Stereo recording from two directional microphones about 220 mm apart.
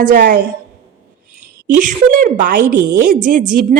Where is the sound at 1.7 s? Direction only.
40° right (ahead or behind).